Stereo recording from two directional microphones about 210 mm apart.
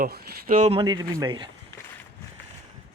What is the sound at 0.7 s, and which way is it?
Speech, 20° right (ahead or behind).